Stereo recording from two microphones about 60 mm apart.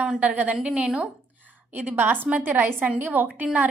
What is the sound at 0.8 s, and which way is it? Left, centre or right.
Speech, centre.